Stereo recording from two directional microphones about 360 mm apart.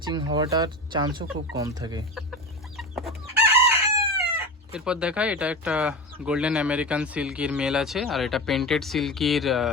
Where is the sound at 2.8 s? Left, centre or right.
Centre.